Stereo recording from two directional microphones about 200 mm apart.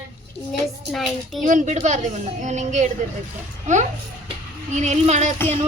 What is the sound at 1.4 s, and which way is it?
A woman's voice, 40° right (ahead or behind).